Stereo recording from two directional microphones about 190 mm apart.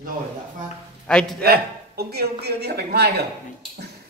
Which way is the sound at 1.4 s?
55° right (ahead or behind).